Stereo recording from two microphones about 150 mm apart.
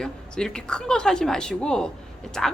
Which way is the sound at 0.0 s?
5° left (ahead or behind).